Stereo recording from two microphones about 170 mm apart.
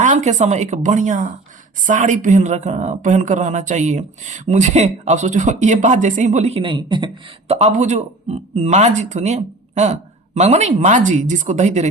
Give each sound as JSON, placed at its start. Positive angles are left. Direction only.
{"t": 0.0, "sound": "speech", "side_deg": -45}